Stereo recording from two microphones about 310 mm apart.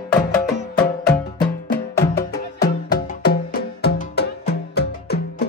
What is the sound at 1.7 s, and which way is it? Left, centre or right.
Music, left.